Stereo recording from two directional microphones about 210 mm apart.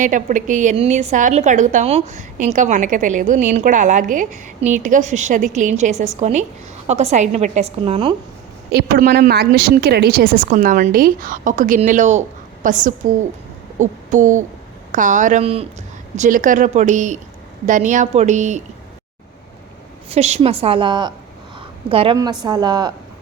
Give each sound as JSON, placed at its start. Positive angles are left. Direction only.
{"t": 0.0, "sound": "a woman's voice", "side_deg": -40}
{"t": 8.7, "sound": "a woman's voice", "side_deg": -50}
{"t": 13.7, "sound": "a sound", "side_deg": -35}
{"t": 14.9, "sound": "a woman's voice", "side_deg": -40}
{"t": 20.1, "sound": "a woman's voice", "side_deg": -30}